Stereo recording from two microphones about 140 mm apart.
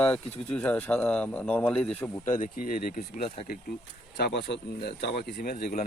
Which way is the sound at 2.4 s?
75° left (ahead or behind).